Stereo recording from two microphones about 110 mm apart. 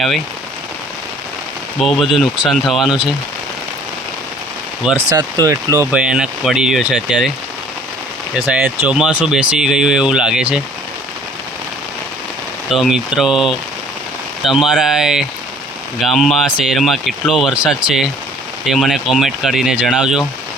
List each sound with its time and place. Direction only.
1.8 s speech: centre (ahead or behind)
5.0 s speech: 35° right (ahead or behind)
5.9 s speech: 10° right (ahead or behind)
8.4 s speech: 10° right (ahead or behind)
12.7 s speech: centre (ahead or behind)